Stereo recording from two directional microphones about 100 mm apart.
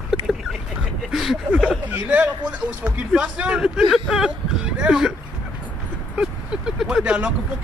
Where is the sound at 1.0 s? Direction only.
5° right (ahead or behind).